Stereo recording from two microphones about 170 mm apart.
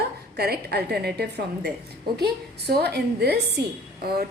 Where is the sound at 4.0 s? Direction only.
65° right (ahead or behind).